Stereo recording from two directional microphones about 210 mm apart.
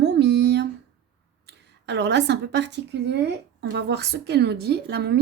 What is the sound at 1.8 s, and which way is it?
A woman's voice, 55° right (ahead or behind).